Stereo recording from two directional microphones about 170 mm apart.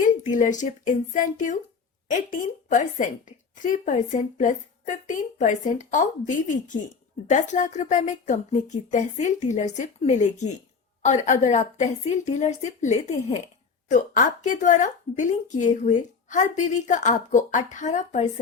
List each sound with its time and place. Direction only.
0.0 s a woman's voice: 50° left (ahead or behind)